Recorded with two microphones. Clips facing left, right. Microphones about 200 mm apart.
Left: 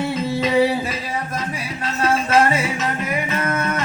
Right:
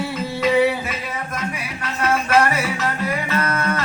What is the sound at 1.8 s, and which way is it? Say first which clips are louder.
Music: left 1 dB; 25° left (ahead or behind).